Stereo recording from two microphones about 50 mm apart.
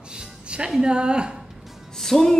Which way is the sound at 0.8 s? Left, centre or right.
Centre.